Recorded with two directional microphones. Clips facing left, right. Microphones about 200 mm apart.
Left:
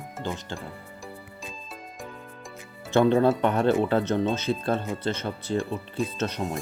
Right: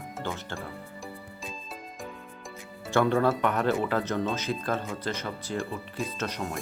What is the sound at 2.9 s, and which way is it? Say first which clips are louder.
Speech: left 4 dB; 25° left (ahead or behind).